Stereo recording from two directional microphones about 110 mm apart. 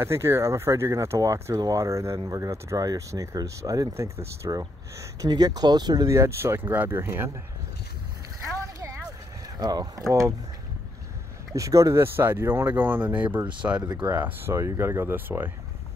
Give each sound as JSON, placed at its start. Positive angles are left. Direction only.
{"t": 0.0, "sound": "speech", "side_deg": -25}
{"t": 9.6, "sound": "speech", "side_deg": -35}
{"t": 11.5, "sound": "speech", "side_deg": -30}